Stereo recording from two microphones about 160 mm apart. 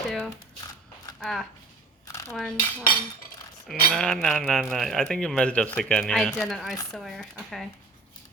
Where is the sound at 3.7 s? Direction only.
Centre (ahead or behind).